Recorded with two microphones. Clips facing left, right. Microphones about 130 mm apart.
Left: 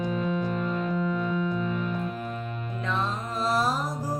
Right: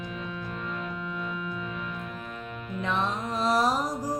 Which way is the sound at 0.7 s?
35° left (ahead or behind).